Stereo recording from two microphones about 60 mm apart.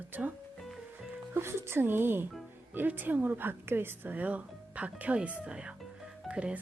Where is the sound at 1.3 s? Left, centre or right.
Right.